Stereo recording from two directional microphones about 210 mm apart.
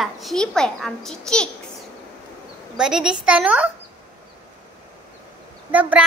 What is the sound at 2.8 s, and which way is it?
Speech, 5° right (ahead or behind).